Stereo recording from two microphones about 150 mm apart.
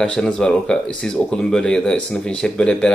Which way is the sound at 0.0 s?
5° left (ahead or behind).